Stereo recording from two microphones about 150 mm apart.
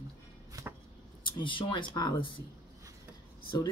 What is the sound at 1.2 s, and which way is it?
Speech, 35° left (ahead or behind).